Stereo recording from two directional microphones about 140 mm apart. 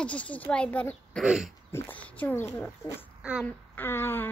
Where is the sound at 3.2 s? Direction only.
5° right (ahead or behind).